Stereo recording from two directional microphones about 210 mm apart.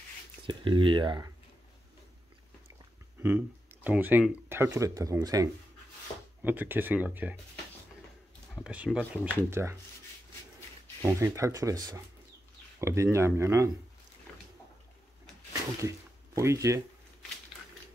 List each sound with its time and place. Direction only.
0.5 s speech: 25° right (ahead or behind)
3.2 s speech: 10° right (ahead or behind)
8.5 s speech: 5° right (ahead or behind)
11.0 s speech: 15° right (ahead or behind)
16.3 s speech: 15° right (ahead or behind)